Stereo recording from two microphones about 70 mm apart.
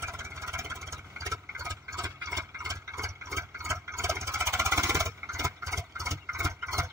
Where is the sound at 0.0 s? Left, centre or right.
Right.